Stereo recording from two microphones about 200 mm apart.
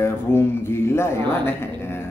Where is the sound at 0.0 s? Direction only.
10° left (ahead or behind).